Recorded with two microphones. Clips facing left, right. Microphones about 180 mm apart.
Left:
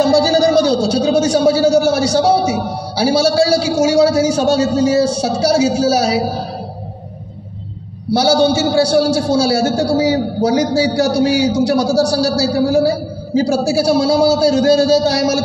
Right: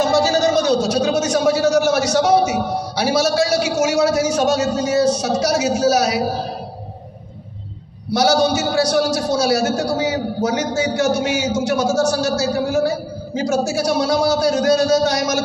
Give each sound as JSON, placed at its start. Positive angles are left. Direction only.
{"t": 0.0, "sound": "a sound", "side_deg": 30}
{"t": 5.4, "sound": "a man's voice", "side_deg": 30}
{"t": 8.1, "sound": "a man's voice", "side_deg": 30}